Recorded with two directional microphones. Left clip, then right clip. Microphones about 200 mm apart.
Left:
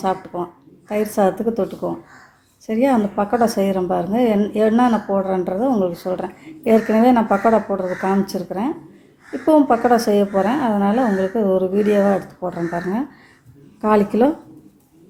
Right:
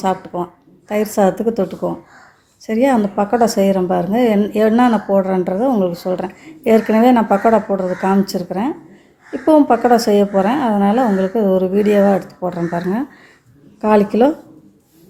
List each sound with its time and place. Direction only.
0.0 s a woman's voice: 10° right (ahead or behind)